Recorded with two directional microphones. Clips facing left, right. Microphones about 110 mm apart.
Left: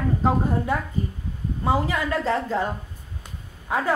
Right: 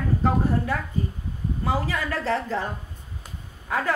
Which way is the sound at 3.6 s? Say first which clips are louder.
Left 2 dB; 15° left (ahead or behind).